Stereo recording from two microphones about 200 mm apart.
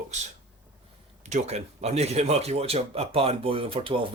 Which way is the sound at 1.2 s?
35° right (ahead or behind).